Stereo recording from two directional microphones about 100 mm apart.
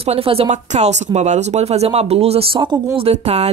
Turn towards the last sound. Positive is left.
turn(degrees=-90)